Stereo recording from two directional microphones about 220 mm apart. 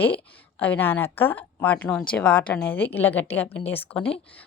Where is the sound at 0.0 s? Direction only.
10° left (ahead or behind).